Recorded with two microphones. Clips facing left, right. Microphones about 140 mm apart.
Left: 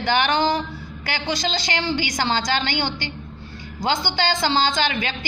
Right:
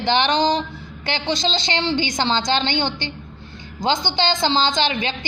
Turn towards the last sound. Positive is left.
turn(degrees=-25)  # may be behind; listen again after turning